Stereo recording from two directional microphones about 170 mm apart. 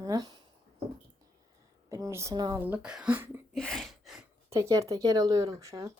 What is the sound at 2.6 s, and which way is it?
Speech, 10° right (ahead or behind).